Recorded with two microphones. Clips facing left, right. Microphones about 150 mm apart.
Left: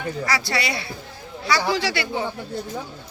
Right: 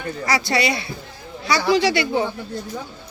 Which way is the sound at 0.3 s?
20° right (ahead or behind).